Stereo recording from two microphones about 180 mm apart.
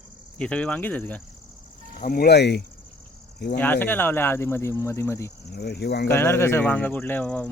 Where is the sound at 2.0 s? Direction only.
50° left (ahead or behind); by 2.6 s 65° left (ahead or behind).